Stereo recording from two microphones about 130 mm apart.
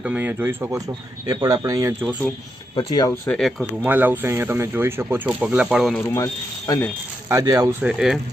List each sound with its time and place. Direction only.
0.0 s speech: 10° right (ahead or behind)
2.7 s speech: 35° left (ahead or behind)
3.2 s speech: centre (ahead or behind)
3.8 s speech: 15° right (ahead or behind)
6.1 s speech: 25° left (ahead or behind)
7.3 s speech: 25° right (ahead or behind)
7.7 s speech: 5° right (ahead or behind)